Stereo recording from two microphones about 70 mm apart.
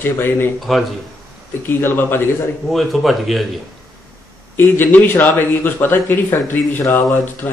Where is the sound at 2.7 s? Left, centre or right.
Centre.